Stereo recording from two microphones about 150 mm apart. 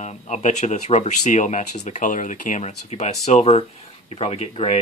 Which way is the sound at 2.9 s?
45° left (ahead or behind).